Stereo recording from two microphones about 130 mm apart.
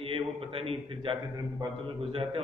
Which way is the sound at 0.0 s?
45° right (ahead or behind).